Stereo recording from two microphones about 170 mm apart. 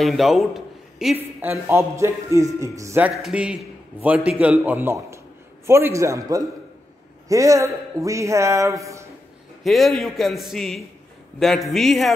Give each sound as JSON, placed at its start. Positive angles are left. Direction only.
{"t": 0.0, "sound": "a man's voice", "side_deg": 0}
{"t": 3.2, "sound": "a man's voice", "side_deg": -5}
{"t": 9.6, "sound": "a man's voice", "side_deg": 0}